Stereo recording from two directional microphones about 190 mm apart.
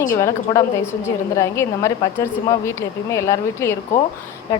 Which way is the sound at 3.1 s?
15° left (ahead or behind).